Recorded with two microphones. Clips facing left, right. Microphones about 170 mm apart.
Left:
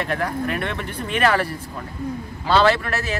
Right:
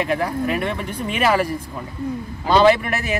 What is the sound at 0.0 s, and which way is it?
Speech, 10° right (ahead or behind).